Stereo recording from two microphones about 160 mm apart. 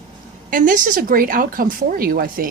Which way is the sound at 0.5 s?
55° right (ahead or behind).